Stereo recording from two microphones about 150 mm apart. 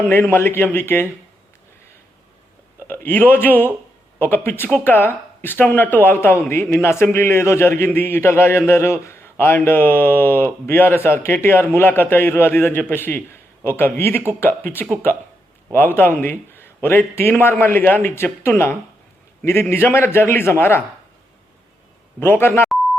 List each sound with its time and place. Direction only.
0.0 s speech: 15° left (ahead or behind)
2.8 s speech: 15° left (ahead or behind)
22.2 s speech: 15° left (ahead or behind)